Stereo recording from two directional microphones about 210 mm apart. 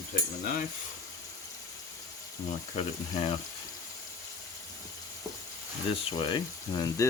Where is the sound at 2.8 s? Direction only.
25° left (ahead or behind).